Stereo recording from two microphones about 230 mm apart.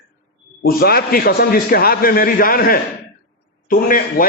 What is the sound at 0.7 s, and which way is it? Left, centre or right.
A man's voice, left.